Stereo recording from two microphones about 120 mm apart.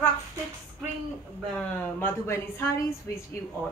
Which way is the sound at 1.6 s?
15° left (ahead or behind).